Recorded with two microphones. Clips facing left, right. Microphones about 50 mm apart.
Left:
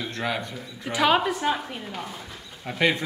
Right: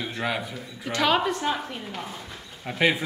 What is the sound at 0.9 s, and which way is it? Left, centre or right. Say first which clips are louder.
A woman's voice: left 1 dB; centre.